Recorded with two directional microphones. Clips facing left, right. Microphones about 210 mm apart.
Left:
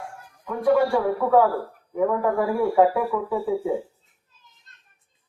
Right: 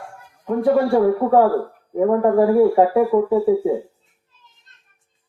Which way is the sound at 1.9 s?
40° right (ahead or behind).